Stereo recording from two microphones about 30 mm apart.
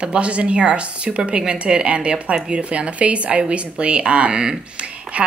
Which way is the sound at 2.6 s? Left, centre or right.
Right.